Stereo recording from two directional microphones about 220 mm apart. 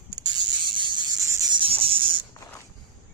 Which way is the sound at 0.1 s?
15° right (ahead or behind).